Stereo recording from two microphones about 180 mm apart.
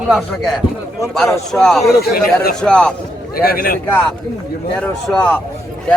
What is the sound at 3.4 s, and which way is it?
Speech, 55° left (ahead or behind).